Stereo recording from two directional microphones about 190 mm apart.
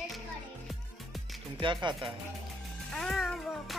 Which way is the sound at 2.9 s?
Centre (ahead or behind).